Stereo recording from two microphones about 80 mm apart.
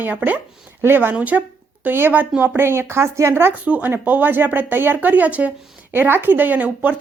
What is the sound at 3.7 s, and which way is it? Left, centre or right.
Speech, centre.